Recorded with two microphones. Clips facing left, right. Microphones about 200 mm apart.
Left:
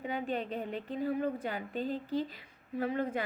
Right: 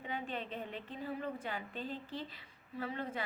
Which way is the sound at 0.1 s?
40° left (ahead or behind).